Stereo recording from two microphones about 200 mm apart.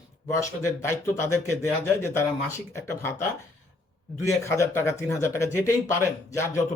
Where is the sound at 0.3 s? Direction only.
15° left (ahead or behind).